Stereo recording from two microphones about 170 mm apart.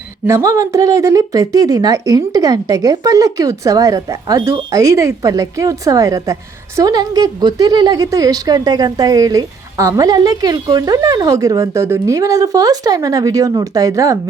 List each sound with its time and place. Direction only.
0.3 s a woman's voice: 20° right (ahead or behind)